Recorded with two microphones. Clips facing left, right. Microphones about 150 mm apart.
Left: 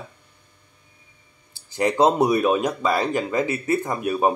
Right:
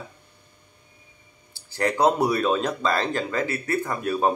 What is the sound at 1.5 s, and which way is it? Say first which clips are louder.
Speech: left 3 dB; 20° left (ahead or behind).